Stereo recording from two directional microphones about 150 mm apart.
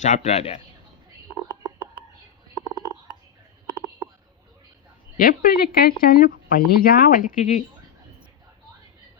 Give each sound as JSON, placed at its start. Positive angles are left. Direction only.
{"t": 0.0, "sound": "a man's voice", "side_deg": 50}
{"t": 5.1, "sound": "speech", "side_deg": 75}